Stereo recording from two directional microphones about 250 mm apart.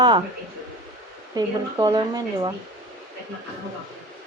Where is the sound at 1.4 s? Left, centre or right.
Centre.